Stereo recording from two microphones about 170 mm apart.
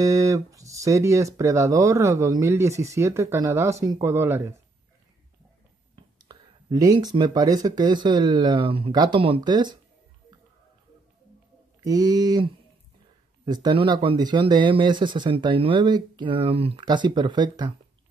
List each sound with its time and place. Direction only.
0.0 s speech: 20° right (ahead or behind)
6.1 s speech: 25° right (ahead or behind)
11.8 s speech: 20° right (ahead or behind)
13.5 s speech: 25° right (ahead or behind)